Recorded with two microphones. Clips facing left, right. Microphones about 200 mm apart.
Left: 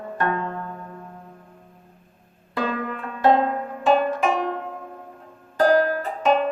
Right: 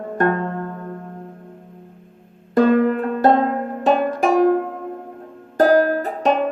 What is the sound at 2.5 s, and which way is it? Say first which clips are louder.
Music: right 12 dB; 45° right (ahead or behind).